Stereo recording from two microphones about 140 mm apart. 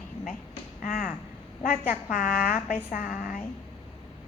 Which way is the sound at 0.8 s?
75° left (ahead or behind).